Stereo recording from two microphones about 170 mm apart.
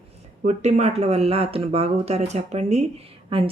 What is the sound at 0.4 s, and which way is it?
A woman's voice, 40° right (ahead or behind).